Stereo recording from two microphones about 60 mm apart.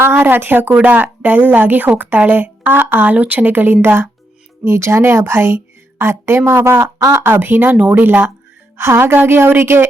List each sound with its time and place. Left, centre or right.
0.0 s a woman's voice: right